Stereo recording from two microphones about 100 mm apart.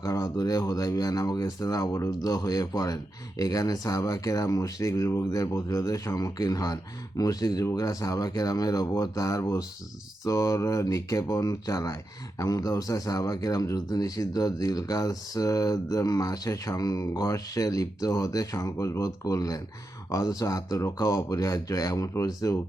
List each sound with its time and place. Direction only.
0.0 s speech: 35° left (ahead or behind)